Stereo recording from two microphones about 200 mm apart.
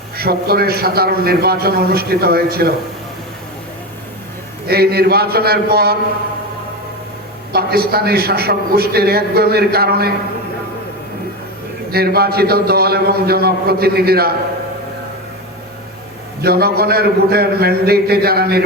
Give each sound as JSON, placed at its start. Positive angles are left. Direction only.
{"t": 0.2, "sound": "a man's voice", "side_deg": -50}
{"t": 4.7, "sound": "a man's voice", "side_deg": -50}
{"t": 7.5, "sound": "a man's voice", "side_deg": -50}
{"t": 11.9, "sound": "a man's voice", "side_deg": -50}
{"t": 16.4, "sound": "a man's voice", "side_deg": -50}